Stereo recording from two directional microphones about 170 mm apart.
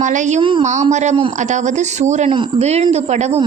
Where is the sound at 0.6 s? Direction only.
45° right (ahead or behind).